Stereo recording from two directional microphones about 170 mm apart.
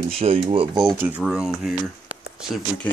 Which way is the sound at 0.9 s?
10° right (ahead or behind).